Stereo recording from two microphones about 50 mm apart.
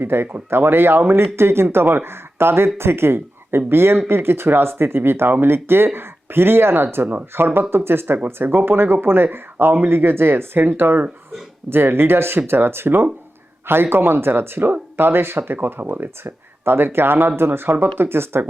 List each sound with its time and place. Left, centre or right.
0.0 s speech: right
15.5 s speech: right